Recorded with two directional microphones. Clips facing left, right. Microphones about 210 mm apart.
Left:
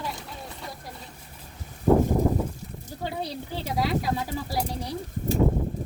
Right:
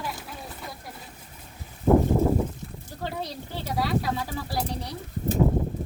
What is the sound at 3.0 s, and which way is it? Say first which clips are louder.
Speech: left 1 dB; 10° left (ahead or behind).